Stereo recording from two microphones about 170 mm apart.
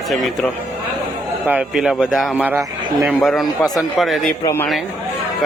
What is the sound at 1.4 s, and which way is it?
Speech, 5° right (ahead or behind).